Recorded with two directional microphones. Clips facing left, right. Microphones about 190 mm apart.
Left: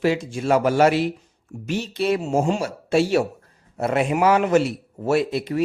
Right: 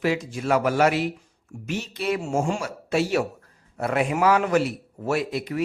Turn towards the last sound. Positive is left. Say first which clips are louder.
# left 5 dB
turn(degrees=30)  # may be behind; listen again after turning